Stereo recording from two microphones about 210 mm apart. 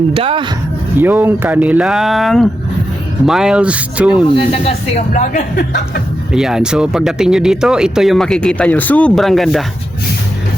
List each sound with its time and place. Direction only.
0.1 s speech: 25° right (ahead or behind)
0.9 s speech: 10° right (ahead or behind)
4.1 s speech: 25° left (ahead or behind); by 6.0 s 40° left (ahead or behind)
6.3 s speech: 5° right (ahead or behind)